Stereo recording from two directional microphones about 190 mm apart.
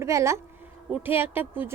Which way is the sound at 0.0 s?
15° right (ahead or behind).